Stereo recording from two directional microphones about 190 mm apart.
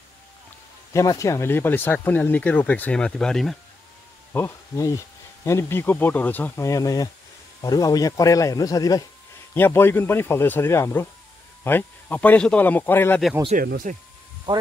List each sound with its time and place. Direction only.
0.9 s speech: 15° left (ahead or behind)
4.3 s speech: 15° left (ahead or behind)
13.6 s speech: 50° right (ahead or behind)
14.5 s speech: 25° right (ahead or behind)